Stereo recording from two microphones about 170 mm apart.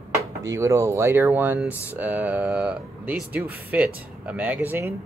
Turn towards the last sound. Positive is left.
turn(degrees=-15)  # may be behind; listen again after turning